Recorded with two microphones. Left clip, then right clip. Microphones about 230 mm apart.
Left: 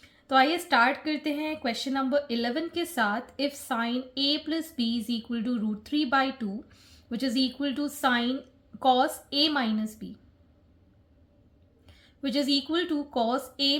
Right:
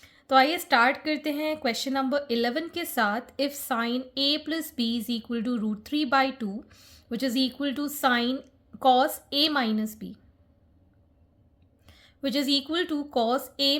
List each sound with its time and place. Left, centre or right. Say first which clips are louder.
0.0 s a woman's voice: right 2 dB; right
11.9 s a woman's voice: right 2 dB; right